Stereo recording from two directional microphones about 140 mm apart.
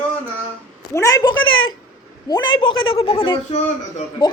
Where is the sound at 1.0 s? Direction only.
20° left (ahead or behind).